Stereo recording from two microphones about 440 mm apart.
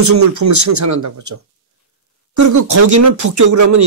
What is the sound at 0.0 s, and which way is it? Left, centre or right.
Speech, right.